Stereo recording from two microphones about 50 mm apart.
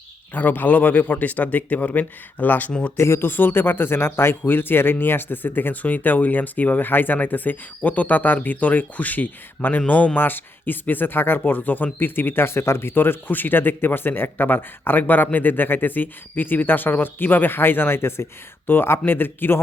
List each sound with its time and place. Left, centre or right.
0.3 s a man's voice: left
2.9 s speech: left
3.2 s a man's voice: left
10.2 s speech: left